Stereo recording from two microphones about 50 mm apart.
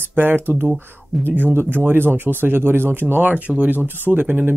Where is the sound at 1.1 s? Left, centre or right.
Centre.